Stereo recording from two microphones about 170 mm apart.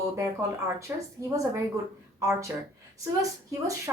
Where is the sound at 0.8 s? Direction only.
15° right (ahead or behind).